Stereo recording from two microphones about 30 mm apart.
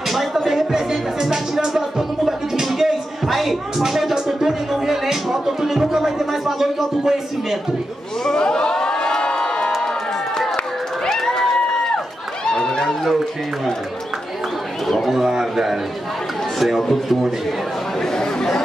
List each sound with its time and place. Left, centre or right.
0.1 s music: centre
0.6 s music: centre
2.6 s music: centre
3.8 s a sound: centre
4.3 s music: centre
8.4 s crowd: left
11.2 s a sound: centre
12.4 s chatter: left
14.9 s a man's voice: centre
16.5 s speech: centre
18.0 s chatter: centre